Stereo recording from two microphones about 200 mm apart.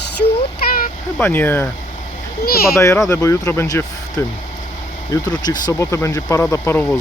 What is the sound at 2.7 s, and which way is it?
Speech, 15° left (ahead or behind).